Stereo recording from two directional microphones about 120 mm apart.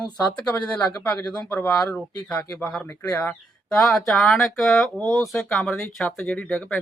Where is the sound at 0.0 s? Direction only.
10° left (ahead or behind).